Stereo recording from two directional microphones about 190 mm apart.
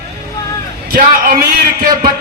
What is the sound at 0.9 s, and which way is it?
Speech, 50° right (ahead or behind).